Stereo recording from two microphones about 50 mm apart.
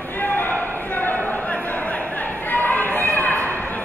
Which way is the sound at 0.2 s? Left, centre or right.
Left.